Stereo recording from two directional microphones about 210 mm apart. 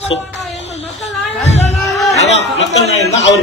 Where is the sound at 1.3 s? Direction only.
30° left (ahead or behind).